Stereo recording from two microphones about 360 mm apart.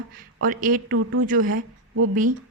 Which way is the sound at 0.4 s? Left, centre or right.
Right.